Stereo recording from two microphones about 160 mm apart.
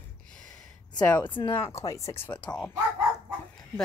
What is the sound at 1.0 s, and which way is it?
Speech, 10° left (ahead or behind).